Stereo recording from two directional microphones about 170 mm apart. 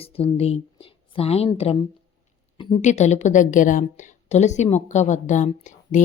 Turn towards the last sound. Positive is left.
turn(degrees=45)  # may be behind; listen again after turning